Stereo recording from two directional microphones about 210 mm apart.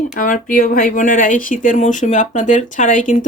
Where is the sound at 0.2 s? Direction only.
40° left (ahead or behind).